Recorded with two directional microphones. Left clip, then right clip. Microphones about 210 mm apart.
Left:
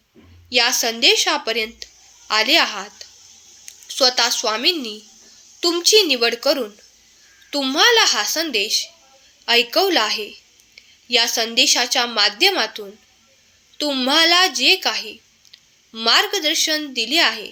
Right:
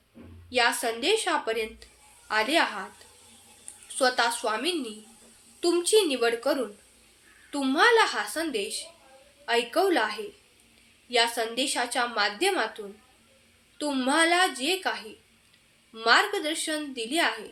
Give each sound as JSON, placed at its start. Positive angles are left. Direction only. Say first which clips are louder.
{"t": 0.5, "sound": "speech", "louder": "left 7 dB", "side_deg": 35}
{"t": 3.8, "sound": "speech", "louder": "left 7 dB", "side_deg": 35}